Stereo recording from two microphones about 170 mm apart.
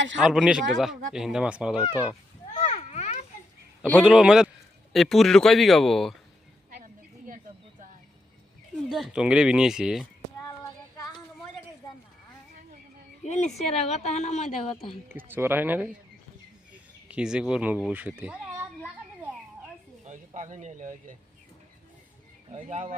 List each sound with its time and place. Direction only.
0.3 s speech: 5° right (ahead or behind)
2.6 s a sound: 40° left (ahead or behind)
4.0 s speech: 5° right (ahead or behind)
8.9 s speech: centre (ahead or behind)
10.6 s child singing: 20° left (ahead or behind)
13.2 s a woman's voice: 40° left (ahead or behind)
15.1 s speech: 10° right (ahead or behind)
17.1 s speech: 5° right (ahead or behind)
20.1 s speech: 45° right (ahead or behind)
22.5 s speech: 40° right (ahead or behind)